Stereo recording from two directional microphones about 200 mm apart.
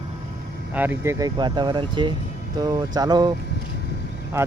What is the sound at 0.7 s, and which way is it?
Speech, 10° right (ahead or behind).